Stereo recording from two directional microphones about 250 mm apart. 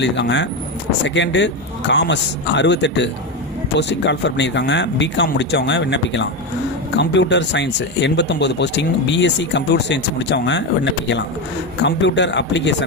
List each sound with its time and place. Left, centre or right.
0.0 s speech: left